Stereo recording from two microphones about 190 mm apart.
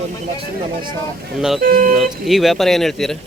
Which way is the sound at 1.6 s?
50° right (ahead or behind).